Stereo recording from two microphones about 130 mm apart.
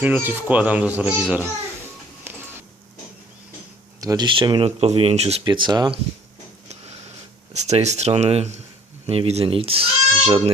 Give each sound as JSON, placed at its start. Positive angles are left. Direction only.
{"t": 0.0, "sound": "speech", "side_deg": -15}
{"t": 4.0, "sound": "speech", "side_deg": -25}
{"t": 4.3, "sound": "speech", "side_deg": -35}
{"t": 5.5, "sound": "speech", "side_deg": -35}
{"t": 7.5, "sound": "speech", "side_deg": -60}